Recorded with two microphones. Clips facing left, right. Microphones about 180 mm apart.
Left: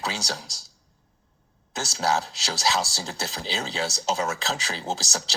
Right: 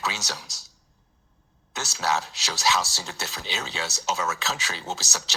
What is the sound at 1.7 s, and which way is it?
Speech, 35° left (ahead or behind).